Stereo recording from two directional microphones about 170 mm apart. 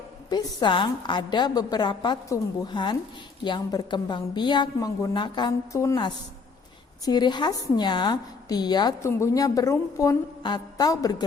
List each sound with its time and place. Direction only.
0.3 s a woman's voice: 25° left (ahead or behind)